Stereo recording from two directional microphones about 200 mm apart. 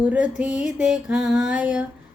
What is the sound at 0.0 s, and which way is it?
Music, 5° right (ahead or behind).